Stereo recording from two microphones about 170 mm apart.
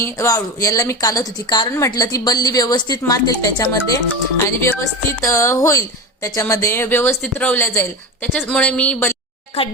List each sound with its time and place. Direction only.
0.0 s a woman's voice: 15° left (ahead or behind)
9.5 s a woman's voice: 35° left (ahead or behind)